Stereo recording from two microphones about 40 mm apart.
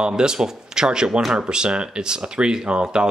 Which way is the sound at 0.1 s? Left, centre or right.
Centre.